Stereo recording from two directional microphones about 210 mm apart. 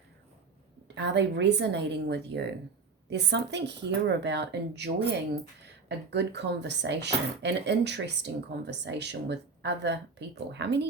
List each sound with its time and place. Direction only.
0.9 s a woman's voice: 55° right (ahead or behind)
6.1 s speech: 55° right (ahead or behind)